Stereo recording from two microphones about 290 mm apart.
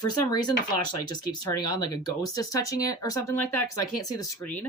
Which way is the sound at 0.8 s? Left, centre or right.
Left.